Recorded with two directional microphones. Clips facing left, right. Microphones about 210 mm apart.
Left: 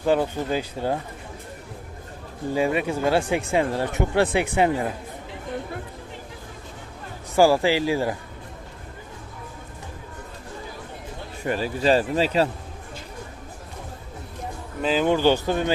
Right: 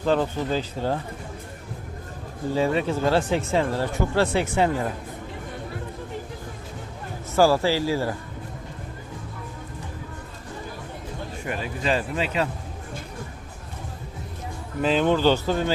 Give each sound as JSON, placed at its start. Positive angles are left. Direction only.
{"t": 0.0, "sound": "speech", "side_deg": 10}
{"t": 2.6, "sound": "speech", "side_deg": 10}
{"t": 7.3, "sound": "speech", "side_deg": 15}
{"t": 11.4, "sound": "speech", "side_deg": 35}
{"t": 14.8, "sound": "speech", "side_deg": 0}
{"t": 15.0, "sound": "speech", "side_deg": 15}